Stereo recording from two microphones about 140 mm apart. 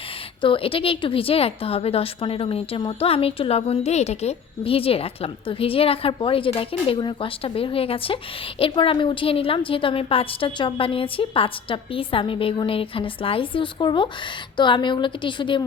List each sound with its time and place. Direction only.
0.4 s a woman's voice: 40° left (ahead or behind)